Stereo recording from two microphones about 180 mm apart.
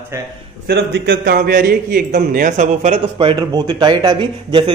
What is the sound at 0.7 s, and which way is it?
A man's voice, 70° right (ahead or behind).